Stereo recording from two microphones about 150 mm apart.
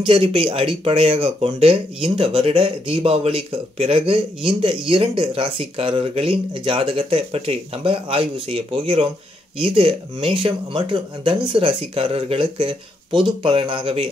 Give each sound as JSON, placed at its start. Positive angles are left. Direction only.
{"t": 0.0, "sound": "speech", "side_deg": -35}